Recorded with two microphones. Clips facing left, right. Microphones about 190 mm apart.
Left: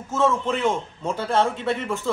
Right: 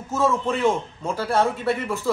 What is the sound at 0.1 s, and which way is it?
A man's voice, 10° right (ahead or behind).